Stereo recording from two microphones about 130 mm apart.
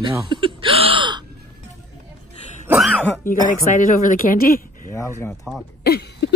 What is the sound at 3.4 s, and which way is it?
Speech, 90° left.